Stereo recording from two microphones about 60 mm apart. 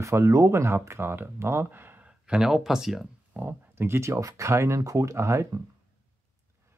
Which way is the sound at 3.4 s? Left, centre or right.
Right.